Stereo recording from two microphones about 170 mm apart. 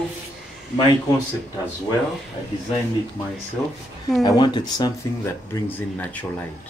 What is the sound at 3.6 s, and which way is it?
Speech, 10° left (ahead or behind).